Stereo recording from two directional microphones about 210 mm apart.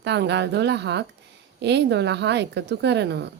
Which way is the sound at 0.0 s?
55° right (ahead or behind).